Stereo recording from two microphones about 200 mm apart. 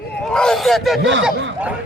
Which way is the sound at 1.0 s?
65° right (ahead or behind).